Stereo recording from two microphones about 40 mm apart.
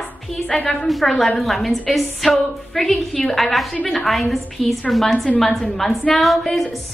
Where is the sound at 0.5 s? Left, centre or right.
Centre.